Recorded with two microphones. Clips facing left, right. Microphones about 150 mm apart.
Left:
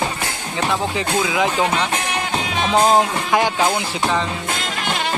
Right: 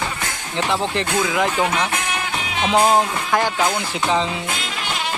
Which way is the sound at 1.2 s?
10° left (ahead or behind).